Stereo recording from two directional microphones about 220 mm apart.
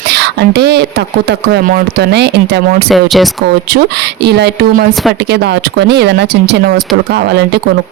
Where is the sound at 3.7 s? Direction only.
50° right (ahead or behind).